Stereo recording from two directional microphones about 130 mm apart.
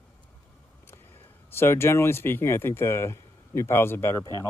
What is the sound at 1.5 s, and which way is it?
Speech, 20° left (ahead or behind).